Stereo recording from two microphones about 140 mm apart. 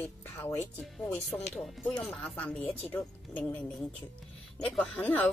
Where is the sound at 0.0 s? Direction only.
15° left (ahead or behind).